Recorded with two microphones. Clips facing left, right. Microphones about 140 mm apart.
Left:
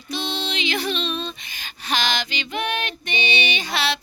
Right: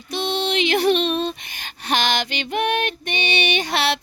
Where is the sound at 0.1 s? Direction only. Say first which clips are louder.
Right 5 dB; 60° right (ahead or behind).